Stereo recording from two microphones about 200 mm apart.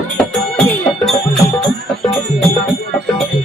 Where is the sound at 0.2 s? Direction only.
5° left (ahead or behind).